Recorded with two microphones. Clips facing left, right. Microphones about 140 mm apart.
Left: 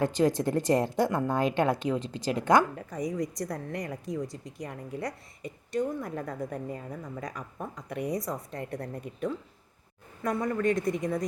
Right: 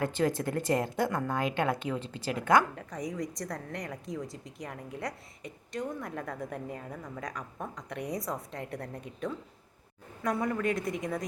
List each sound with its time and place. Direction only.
0.0 s speech: 20° left (ahead or behind)
2.7 s a woman's voice: 5° left (ahead or behind)